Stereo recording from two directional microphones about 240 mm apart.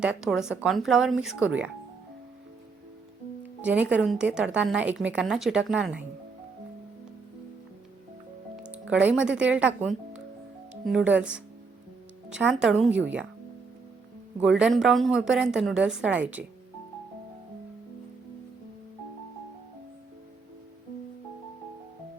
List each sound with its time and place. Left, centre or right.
0.0 s speech: centre
3.4 s music: centre
3.9 s speech: centre
8.9 s speech: centre
14.4 s speech: centre